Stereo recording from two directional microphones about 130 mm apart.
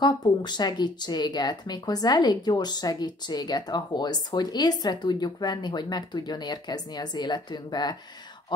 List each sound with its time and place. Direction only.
0.0 s speech: 35° left (ahead or behind)